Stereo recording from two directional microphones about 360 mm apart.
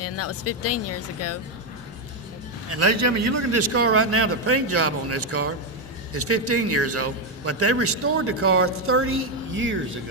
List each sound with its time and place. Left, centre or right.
0.0 s speech: left
2.7 s a man's voice: right